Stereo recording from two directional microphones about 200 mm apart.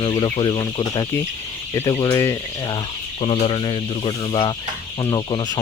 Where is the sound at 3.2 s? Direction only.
30° left (ahead or behind).